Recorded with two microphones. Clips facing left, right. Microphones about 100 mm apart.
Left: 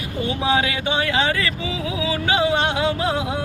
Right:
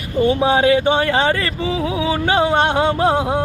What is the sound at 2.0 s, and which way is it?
Music, 45° right (ahead or behind).